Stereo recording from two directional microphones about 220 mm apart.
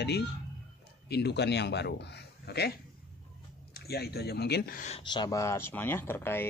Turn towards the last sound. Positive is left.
turn(degrees=10)  # may be behind; listen again after turning